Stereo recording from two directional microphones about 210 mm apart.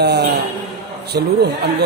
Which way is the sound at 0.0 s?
50° right (ahead or behind).